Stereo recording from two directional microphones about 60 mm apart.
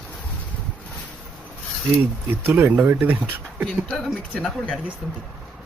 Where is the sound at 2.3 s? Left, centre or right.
Right.